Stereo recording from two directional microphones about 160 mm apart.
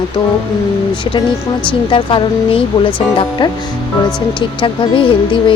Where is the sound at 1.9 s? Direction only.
30° left (ahead or behind).